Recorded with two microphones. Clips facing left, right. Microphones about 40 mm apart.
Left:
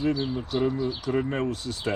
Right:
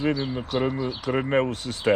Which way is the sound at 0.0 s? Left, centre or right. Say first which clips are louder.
Right 1 dB; right.